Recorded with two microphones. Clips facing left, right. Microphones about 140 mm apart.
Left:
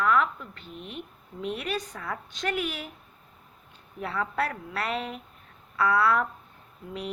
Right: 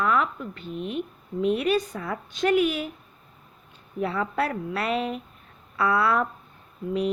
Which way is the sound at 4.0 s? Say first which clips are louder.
Right 4 dB; 25° right (ahead or behind).